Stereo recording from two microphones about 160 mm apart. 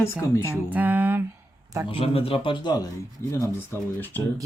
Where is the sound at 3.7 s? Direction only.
10° left (ahead or behind).